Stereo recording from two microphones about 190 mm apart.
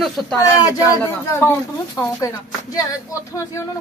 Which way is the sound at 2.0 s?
20° left (ahead or behind).